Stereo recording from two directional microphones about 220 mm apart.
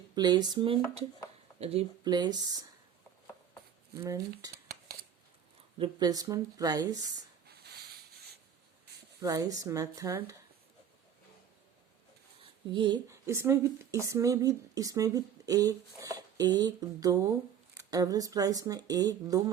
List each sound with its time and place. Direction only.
0.2 s speech: 20° right (ahead or behind)
3.9 s speech: 15° right (ahead or behind)
4.5 s a sound: 45° right (ahead or behind)
5.8 s speech: 20° right (ahead or behind)
7.4 s a sound: 45° right (ahead or behind)
9.2 s speech: 15° right (ahead or behind)
12.4 s speech: 20° right (ahead or behind)